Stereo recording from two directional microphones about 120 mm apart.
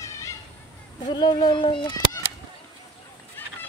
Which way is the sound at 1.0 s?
35° left (ahead or behind).